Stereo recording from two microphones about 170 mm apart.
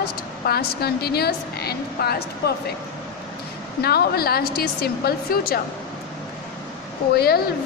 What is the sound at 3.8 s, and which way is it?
A woman's voice, 65° left (ahead or behind).